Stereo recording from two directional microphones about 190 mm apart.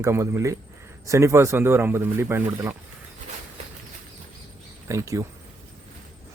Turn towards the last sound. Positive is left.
turn(degrees=-15)  # may be behind; listen again after turning